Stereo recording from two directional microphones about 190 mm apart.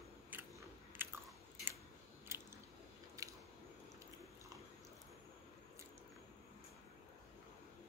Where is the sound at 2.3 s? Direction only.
15° right (ahead or behind).